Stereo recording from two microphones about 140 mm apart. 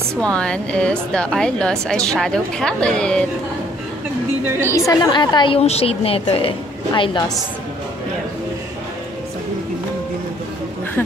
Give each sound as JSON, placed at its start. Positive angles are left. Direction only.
{"t": 0.1, "sound": "a woman's voice", "side_deg": 5}
{"t": 4.6, "sound": "a woman's voice", "side_deg": 20}
{"t": 5.1, "sound": "a woman's voice", "side_deg": 35}
{"t": 5.6, "sound": "a woman's voice", "side_deg": 45}
{"t": 6.9, "sound": "a woman's voice", "side_deg": 30}